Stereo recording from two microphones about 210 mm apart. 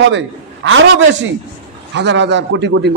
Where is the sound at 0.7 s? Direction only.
60° right (ahead or behind).